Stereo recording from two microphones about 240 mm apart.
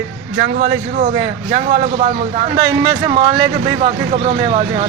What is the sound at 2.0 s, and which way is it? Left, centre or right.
Speech, right.